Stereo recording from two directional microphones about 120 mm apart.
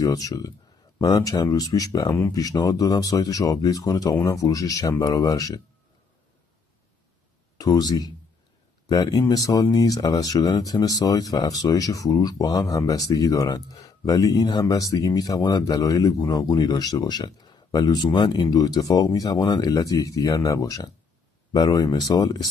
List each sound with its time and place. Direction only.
0.0 s speech: 30° left (ahead or behind)
7.5 s speech: 35° left (ahead or behind)